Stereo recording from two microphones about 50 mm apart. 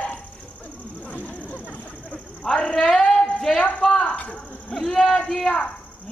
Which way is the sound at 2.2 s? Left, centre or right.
Centre.